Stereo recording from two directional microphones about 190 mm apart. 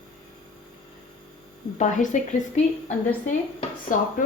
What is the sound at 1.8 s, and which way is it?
A woman's voice, 40° left (ahead or behind).